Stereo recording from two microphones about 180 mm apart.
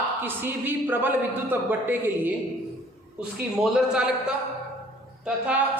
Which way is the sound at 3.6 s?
5° right (ahead or behind).